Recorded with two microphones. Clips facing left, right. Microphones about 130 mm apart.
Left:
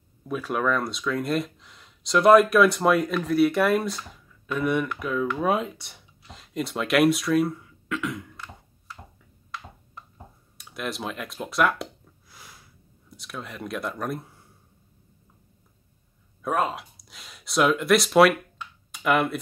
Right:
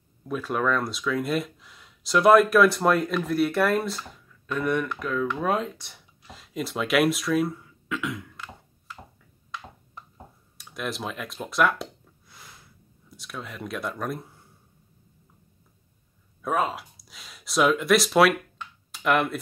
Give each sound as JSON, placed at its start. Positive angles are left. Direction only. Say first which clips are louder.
{"t": 0.2, "sound": "speech", "louder": "even", "side_deg": 5}
{"t": 10.6, "sound": "a sound", "louder": "even", "side_deg": 0}
{"t": 13.1, "sound": "speech", "louder": "left 1 dB", "side_deg": 0}
{"t": 16.4, "sound": "speech", "louder": "even", "side_deg": 0}